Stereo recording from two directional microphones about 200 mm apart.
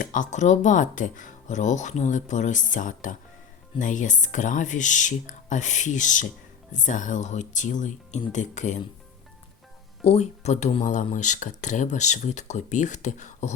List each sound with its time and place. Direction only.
0.0 s speech: 40° left (ahead or behind)
10.0 s speech: 30° left (ahead or behind)